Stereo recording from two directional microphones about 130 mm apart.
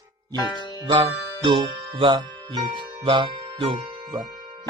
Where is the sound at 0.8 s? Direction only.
35° right (ahead or behind).